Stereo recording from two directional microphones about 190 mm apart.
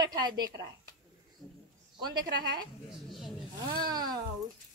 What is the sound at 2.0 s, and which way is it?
Speech, 20° right (ahead or behind).